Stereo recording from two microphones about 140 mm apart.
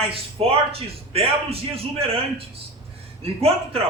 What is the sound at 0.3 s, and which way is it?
A man's voice, 45° right (ahead or behind).